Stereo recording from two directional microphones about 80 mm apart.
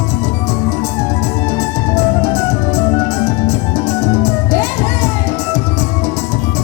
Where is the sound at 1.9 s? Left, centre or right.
Left.